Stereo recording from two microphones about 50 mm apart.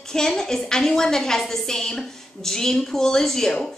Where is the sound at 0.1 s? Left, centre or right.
Centre.